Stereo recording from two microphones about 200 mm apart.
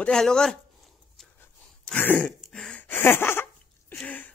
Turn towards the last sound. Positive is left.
turn(degrees=5)  # may be behind; listen again after turning